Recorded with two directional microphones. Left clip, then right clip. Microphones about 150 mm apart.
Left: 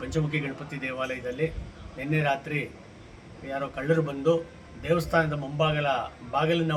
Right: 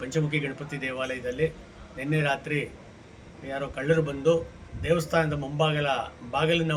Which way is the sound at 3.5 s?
25° right (ahead or behind).